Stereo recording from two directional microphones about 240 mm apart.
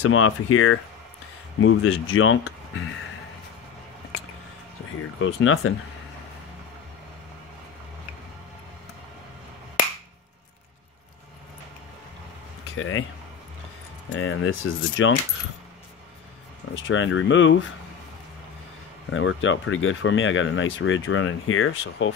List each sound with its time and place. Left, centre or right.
0.1 s speech: left
5.2 s speech: left
12.7 s speech: left
14.1 s speech: left
16.8 s speech: left
19.0 s speech: left